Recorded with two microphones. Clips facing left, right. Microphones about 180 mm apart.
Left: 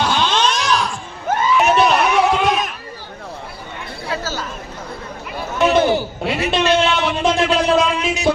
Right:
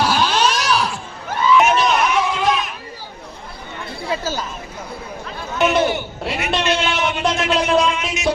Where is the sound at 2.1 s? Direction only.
70° left (ahead or behind).